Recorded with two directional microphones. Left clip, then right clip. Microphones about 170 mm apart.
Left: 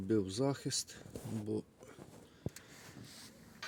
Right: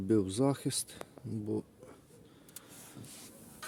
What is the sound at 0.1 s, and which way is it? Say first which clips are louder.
Speech: right 4 dB; 5° right (ahead or behind).